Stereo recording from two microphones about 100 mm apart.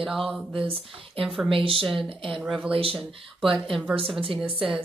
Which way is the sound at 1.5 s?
65° right (ahead or behind).